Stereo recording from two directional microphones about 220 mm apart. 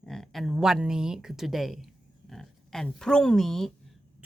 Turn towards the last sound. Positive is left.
turn(degrees=0)  # may be behind; listen again after turning